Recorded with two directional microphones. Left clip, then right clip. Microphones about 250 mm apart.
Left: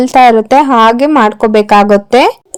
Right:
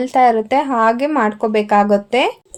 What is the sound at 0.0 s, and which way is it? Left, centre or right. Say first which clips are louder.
Speech: left 8 dB; left.